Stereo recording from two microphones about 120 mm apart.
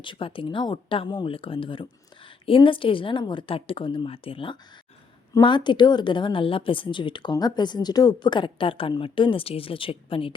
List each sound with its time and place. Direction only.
0.0 s a woman's voice: 45° left (ahead or behind)